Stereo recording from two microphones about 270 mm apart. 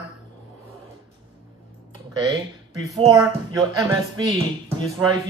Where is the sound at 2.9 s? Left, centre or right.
Centre.